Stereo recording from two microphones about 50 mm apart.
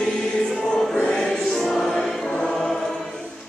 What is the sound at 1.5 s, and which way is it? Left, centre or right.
Music, centre.